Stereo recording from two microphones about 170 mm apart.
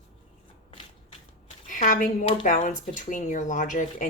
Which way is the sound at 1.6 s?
50° left (ahead or behind).